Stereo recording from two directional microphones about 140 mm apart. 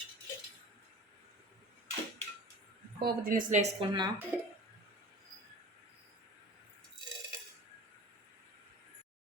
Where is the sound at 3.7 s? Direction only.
30° right (ahead or behind).